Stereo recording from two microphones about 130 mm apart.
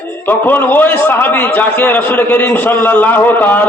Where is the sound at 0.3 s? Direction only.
15° left (ahead or behind).